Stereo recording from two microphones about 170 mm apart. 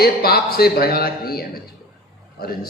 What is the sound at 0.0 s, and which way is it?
A man's voice, 65° left (ahead or behind).